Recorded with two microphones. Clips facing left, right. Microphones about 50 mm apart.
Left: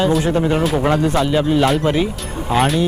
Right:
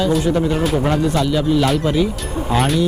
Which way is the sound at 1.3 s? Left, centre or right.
Left.